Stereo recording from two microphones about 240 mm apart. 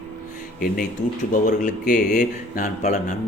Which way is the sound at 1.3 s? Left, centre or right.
Left.